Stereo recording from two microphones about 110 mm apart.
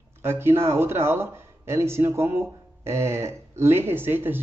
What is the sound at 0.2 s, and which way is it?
A man's voice, 25° right (ahead or behind).